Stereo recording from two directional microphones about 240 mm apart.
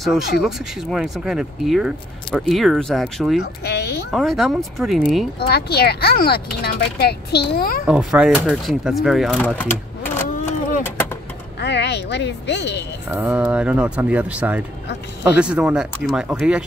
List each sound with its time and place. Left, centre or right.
0.4 s speech: centre
3.6 s a sound: left
4.1 s speech: centre
5.5 s speech: left
7.8 s speech: centre
11.6 s speech: left
13.1 s speech: centre